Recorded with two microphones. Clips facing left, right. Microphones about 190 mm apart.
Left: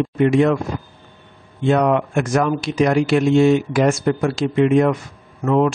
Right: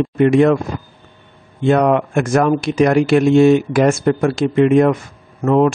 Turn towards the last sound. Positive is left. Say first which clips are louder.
# right 3 dB
turn(degrees=-50)  # may be behind; listen again after turning